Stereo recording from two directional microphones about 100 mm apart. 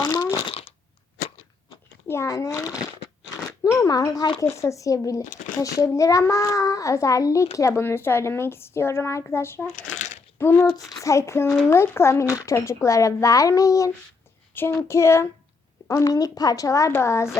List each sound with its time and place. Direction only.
0.0 s fart: 35° left (ahead or behind)
0.4 s fart: 75° left (ahead or behind)
2.0 s speech: 30° left (ahead or behind)
3.6 s a sound: 35° left (ahead or behind)
4.4 s a woman's voice: 30° left (ahead or behind)
14.5 s a woman's voice: 20° left (ahead or behind)